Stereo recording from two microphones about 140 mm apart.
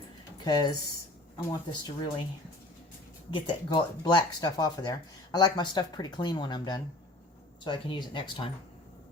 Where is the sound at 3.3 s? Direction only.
35° left (ahead or behind).